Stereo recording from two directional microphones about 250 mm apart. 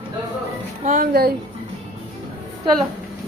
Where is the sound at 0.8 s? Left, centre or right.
Right.